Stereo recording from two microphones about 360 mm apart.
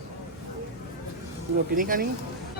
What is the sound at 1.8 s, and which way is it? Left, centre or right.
Speech, right.